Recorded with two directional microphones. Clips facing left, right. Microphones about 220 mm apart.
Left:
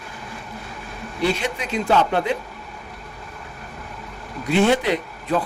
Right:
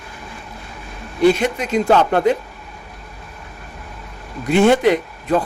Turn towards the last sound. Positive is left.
turn(degrees=-45)  # may be behind; listen again after turning